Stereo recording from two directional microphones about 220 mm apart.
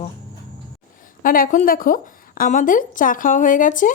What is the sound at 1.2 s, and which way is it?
Speech, 40° left (ahead or behind).